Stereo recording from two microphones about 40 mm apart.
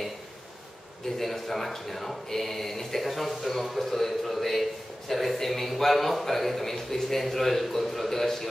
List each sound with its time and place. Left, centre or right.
1.2 s speech: centre